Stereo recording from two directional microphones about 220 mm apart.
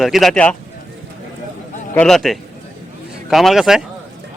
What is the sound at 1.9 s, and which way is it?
A man's voice, 5° left (ahead or behind).